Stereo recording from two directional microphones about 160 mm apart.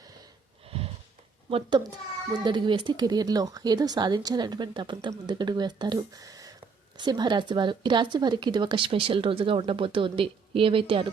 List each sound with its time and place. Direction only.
1.5 s speech: 35° right (ahead or behind)